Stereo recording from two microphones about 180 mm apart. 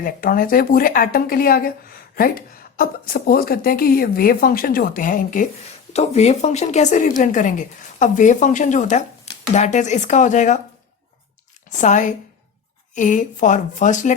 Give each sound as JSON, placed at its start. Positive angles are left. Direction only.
{"t": 0.0, "sound": "speech", "side_deg": 50}
{"t": 5.9, "sound": "speech", "side_deg": 35}
{"t": 11.7, "sound": "a woman's voice", "side_deg": 45}